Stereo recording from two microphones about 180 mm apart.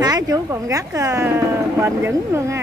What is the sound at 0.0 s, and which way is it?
Speech, 20° right (ahead or behind).